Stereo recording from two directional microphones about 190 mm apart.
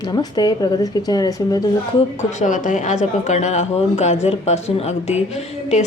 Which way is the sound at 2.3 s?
40° left (ahead or behind).